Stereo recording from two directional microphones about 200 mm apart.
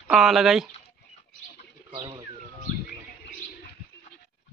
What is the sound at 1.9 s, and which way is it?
Speech, 20° right (ahead or behind).